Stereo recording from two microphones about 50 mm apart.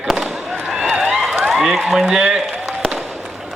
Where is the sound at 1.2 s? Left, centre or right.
Centre.